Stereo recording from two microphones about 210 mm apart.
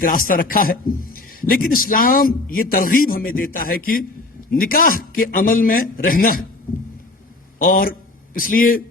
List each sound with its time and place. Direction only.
0.0 s a man's voice: 40° left (ahead or behind)
7.6 s a man's voice: 40° left (ahead or behind)